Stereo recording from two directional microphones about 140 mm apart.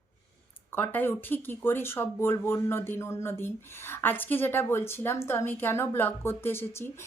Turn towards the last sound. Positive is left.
turn(degrees=15)  # may be behind; listen again after turning